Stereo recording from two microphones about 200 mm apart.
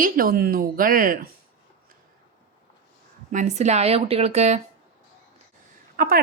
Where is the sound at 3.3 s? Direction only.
35° right (ahead or behind).